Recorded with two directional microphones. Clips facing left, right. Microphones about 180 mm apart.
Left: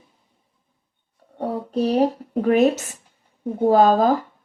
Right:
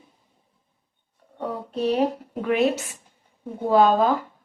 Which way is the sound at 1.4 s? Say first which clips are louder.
Left 4 dB; 40° left (ahead or behind).